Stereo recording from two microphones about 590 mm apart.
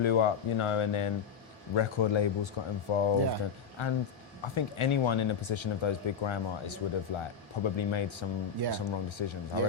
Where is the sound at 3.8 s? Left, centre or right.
Left.